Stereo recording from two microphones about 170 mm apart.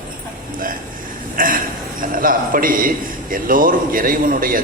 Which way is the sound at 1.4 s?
55° right (ahead or behind).